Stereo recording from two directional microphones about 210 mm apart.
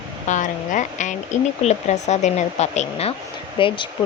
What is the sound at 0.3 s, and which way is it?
Speech, 35° left (ahead or behind).